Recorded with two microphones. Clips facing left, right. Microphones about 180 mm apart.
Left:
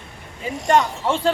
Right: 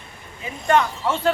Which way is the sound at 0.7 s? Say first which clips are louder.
Left 1 dB; 30° left (ahead or behind).